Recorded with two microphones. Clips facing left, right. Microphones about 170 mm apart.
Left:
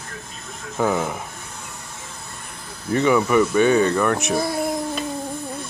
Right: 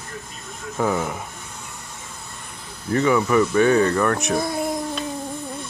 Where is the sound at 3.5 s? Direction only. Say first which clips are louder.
Right 1 dB; 20° left (ahead or behind).